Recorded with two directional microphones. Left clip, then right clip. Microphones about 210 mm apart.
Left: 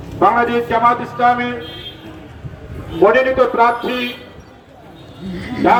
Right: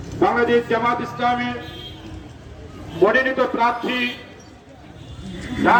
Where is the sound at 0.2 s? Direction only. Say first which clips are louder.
Left 4 dB; 50° left (ahead or behind).